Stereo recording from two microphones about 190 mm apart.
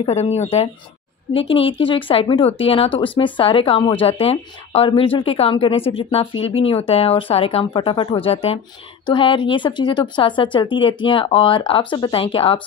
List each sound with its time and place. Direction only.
0.0 s speech: 35° left (ahead or behind)